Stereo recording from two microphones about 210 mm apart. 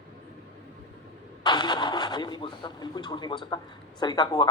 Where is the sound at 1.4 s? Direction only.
20° left (ahead or behind).